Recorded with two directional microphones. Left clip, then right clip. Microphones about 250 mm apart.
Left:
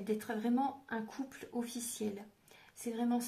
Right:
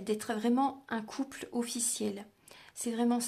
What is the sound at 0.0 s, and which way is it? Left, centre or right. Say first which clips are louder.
Speech: right 4 dB; right.